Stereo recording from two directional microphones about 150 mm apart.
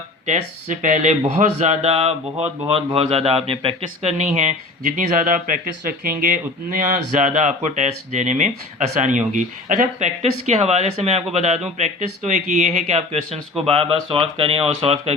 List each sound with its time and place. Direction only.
0.3 s a man's voice: 55° right (ahead or behind)
4.9 s speech: 60° right (ahead or behind); by 15.1 s 40° right (ahead or behind)